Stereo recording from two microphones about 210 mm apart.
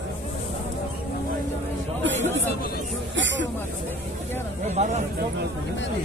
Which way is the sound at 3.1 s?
60° right (ahead or behind).